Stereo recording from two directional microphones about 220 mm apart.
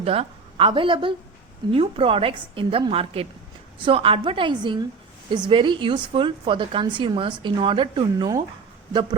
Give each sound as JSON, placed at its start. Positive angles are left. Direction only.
{"t": 0.0, "sound": "a woman's voice", "side_deg": -25}